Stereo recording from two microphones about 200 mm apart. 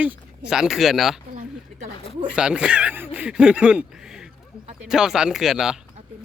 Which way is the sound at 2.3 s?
5° right (ahead or behind).